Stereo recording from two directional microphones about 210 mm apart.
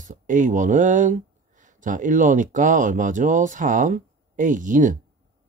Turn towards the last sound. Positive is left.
turn(degrees=-40)  # may be behind; listen again after turning